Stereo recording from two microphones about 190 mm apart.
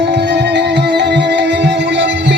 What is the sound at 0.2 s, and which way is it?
Music, 65° right (ahead or behind).